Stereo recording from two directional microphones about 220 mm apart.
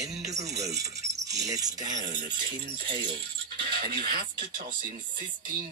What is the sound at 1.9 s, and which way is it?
Speech, 35° right (ahead or behind).